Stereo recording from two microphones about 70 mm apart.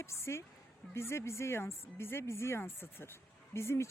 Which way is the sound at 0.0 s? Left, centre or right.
Left.